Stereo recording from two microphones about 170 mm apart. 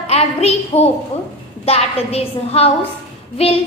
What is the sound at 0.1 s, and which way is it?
A woman's voice, 40° left (ahead or behind).